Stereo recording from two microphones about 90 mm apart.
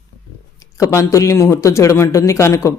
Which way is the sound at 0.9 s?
35° left (ahead or behind).